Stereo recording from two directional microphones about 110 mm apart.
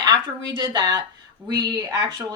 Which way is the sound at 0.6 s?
40° right (ahead or behind).